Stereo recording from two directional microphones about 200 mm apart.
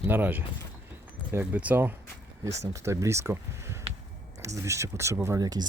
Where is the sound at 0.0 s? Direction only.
10° right (ahead or behind).